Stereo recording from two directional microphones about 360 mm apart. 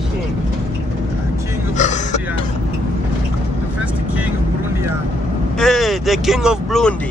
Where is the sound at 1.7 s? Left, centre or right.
Centre.